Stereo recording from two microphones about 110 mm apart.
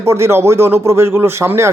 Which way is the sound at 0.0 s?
25° right (ahead or behind).